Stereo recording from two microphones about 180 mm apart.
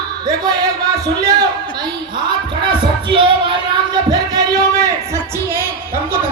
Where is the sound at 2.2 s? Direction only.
25° right (ahead or behind).